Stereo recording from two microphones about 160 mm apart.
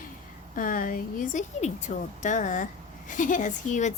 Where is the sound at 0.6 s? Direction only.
55° left (ahead or behind).